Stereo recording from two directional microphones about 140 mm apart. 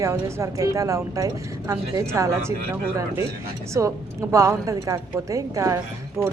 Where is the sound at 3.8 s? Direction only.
20° right (ahead or behind).